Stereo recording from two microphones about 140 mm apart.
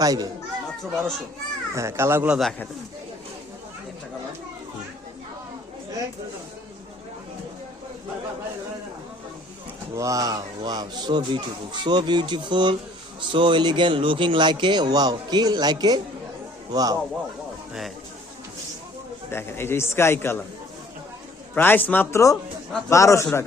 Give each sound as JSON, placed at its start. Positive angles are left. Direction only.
{"t": 0.0, "sound": "speech", "side_deg": -25}
{"t": 0.8, "sound": "a child's voice", "side_deg": 5}
{"t": 1.7, "sound": "speech", "side_deg": -20}
{"t": 9.9, "sound": "speech", "side_deg": -25}
{"t": 19.3, "sound": "a man's voice", "side_deg": 15}
{"t": 21.5, "sound": "a man's voice", "side_deg": 15}